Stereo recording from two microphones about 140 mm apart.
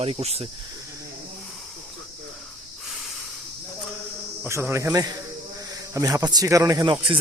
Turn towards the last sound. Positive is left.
turn(degrees=-35)  # may be behind; listen again after turning